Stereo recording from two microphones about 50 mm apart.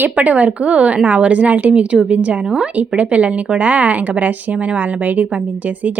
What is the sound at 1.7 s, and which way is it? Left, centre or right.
Speech, right.